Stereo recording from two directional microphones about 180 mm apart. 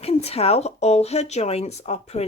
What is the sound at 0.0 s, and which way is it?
Speech, 35° left (ahead or behind).